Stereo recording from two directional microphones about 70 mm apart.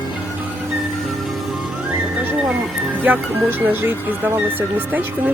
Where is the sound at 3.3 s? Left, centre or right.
Right.